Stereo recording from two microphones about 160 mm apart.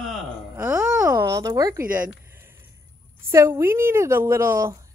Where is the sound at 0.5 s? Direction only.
10° right (ahead or behind).